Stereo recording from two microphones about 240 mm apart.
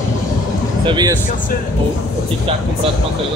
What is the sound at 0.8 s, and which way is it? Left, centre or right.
Speech, centre.